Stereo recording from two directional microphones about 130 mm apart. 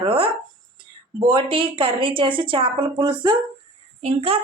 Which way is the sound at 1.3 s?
40° right (ahead or behind).